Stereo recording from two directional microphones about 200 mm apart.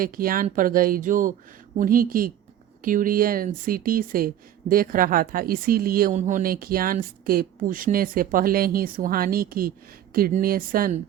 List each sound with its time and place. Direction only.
0.0 s speech: 45° right (ahead or behind)